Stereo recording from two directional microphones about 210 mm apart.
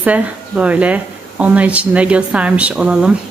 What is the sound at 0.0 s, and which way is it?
Speech, 5° right (ahead or behind).